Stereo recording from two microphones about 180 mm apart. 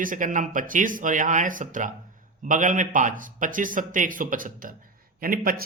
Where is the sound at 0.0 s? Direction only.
45° right (ahead or behind).